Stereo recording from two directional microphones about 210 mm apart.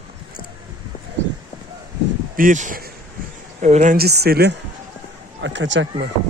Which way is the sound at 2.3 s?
40° right (ahead or behind).